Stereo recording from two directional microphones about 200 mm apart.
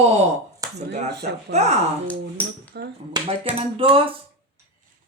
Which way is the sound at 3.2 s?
20° right (ahead or behind).